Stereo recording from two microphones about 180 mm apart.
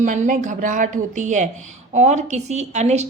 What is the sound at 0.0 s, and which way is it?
A woman's voice, 45° right (ahead or behind).